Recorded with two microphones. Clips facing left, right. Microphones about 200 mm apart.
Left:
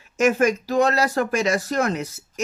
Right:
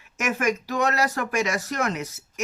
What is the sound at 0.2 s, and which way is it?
Speech, 30° left (ahead or behind).